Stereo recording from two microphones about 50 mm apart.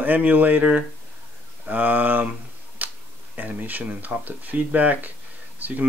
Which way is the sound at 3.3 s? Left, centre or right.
Right.